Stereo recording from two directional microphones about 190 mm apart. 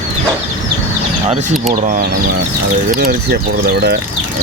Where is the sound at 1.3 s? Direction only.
40° right (ahead or behind).